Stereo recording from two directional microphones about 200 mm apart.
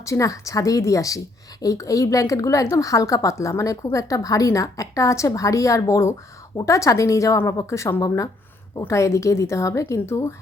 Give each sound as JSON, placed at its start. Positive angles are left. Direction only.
{"t": 0.0, "sound": "a woman's voice", "side_deg": 15}